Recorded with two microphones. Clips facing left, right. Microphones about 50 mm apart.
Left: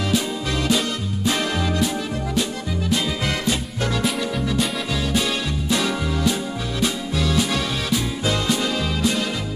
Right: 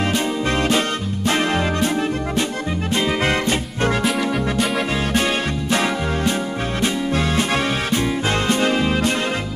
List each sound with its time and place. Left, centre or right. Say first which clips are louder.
0.7 s music: right 2 dB; right
2.9 s music: right 4 dB; right
5.7 s music: right 2 dB; right